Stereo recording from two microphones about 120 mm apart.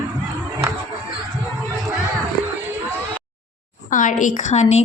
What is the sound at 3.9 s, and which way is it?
Speech, 90° left.